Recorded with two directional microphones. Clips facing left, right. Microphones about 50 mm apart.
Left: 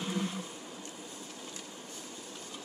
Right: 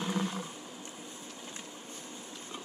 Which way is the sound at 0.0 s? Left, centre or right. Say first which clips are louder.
Right 2 dB; right.